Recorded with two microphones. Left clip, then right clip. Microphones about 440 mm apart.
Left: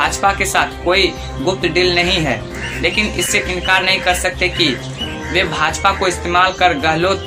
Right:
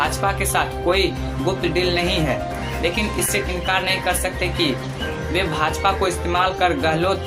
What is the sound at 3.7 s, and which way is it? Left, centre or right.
Speech, right.